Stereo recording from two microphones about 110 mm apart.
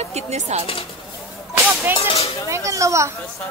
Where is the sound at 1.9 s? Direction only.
60° left (ahead or behind).